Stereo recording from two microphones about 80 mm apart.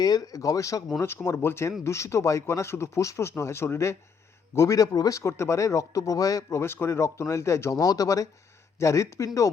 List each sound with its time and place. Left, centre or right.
0.0 s speech: left
0.9 s speech: left